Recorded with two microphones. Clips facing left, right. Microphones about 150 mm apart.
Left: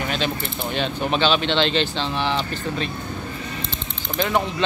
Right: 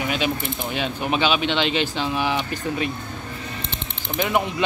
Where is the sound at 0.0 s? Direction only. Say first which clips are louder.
Right 1 dB; 10° right (ahead or behind).